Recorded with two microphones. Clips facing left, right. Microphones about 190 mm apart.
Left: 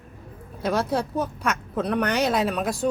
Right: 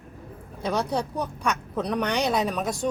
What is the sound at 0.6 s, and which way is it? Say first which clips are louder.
Speech: left 2 dB; 5° left (ahead or behind).